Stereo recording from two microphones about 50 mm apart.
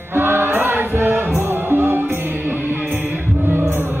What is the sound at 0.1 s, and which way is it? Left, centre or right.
Music, right.